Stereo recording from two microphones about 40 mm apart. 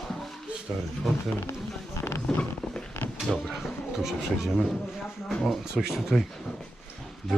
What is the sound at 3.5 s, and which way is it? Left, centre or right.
Speech, centre.